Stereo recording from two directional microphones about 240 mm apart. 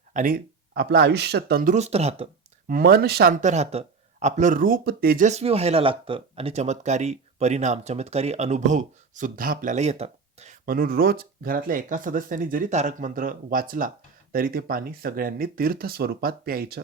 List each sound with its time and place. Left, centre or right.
0.1 s speech: right